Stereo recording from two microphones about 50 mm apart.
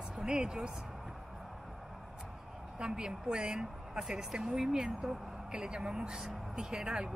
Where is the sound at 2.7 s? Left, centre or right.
Centre.